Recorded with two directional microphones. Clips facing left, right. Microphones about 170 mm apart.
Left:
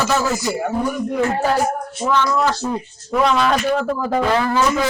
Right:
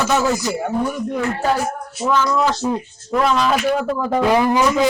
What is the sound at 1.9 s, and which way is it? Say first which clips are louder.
A man's voice: right 1 dB; 5° right (ahead or behind).